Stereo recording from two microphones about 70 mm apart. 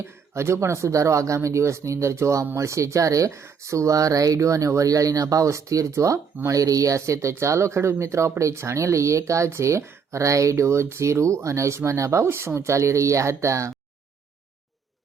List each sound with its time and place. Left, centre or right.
0.0 s speech: right